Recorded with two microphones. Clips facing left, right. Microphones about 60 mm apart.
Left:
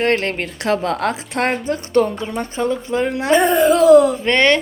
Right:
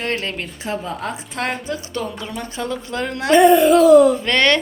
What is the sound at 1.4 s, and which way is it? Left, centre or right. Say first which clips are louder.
Speech: left 4 dB; left.